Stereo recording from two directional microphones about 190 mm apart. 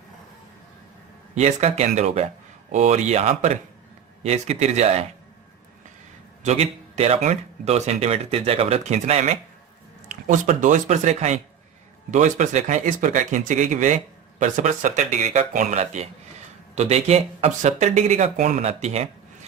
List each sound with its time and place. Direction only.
1.4 s speech: 35° right (ahead or behind)
6.4 s speech: 35° right (ahead or behind)